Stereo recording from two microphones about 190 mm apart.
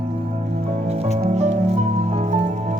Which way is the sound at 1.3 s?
35° right (ahead or behind).